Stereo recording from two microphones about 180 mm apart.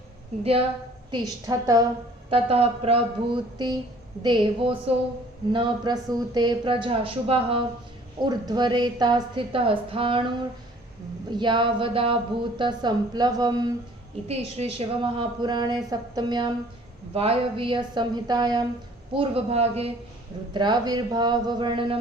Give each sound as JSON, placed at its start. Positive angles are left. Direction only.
{"t": 1.1, "sound": "speech", "side_deg": -20}
{"t": 2.3, "sound": "speech", "side_deg": -35}
{"t": 14.3, "sound": "speech", "side_deg": -35}